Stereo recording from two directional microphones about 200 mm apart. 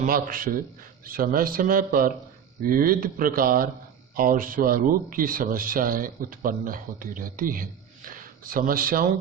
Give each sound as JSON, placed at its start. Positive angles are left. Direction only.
{"t": 0.0, "sound": "speech", "side_deg": -45}